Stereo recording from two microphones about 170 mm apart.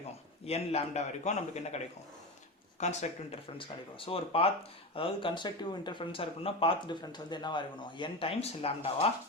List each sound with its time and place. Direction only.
0.4 s speech: 35° left (ahead or behind)
2.8 s speech: 45° left (ahead or behind)
3.6 s speech: 30° left (ahead or behind)